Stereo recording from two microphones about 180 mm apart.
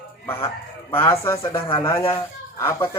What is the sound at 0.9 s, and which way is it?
Speech, 15° left (ahead or behind).